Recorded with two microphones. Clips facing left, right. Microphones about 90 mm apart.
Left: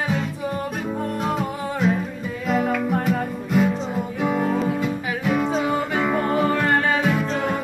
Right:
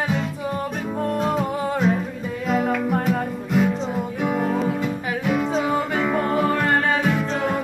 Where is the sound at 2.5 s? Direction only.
15° right (ahead or behind).